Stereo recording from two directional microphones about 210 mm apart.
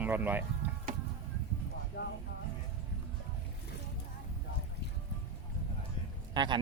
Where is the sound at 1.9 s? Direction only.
50° left (ahead or behind).